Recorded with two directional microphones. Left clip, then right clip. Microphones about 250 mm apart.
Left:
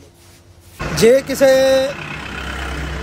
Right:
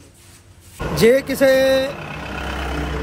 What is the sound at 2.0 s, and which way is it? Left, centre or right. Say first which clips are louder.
Vehicle: left 2 dB; right.